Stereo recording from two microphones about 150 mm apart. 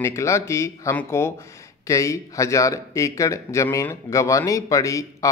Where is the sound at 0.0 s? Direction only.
20° left (ahead or behind).